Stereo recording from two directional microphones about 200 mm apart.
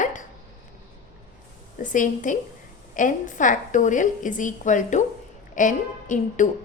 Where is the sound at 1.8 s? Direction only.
40° left (ahead or behind).